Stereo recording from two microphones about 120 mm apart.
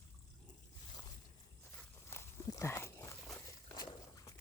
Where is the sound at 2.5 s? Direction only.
25° left (ahead or behind).